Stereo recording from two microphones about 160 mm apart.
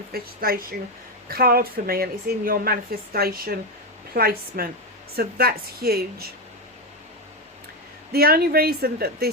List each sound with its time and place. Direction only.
0.1 s a woman's voice: 70° right (ahead or behind)
8.1 s a woman's voice: 75° right (ahead or behind)